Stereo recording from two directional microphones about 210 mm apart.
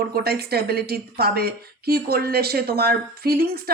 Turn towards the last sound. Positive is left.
turn(degrees=-45)  # may be behind; listen again after turning